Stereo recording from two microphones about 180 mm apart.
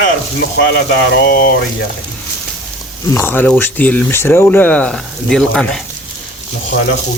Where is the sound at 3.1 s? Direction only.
10° left (ahead or behind).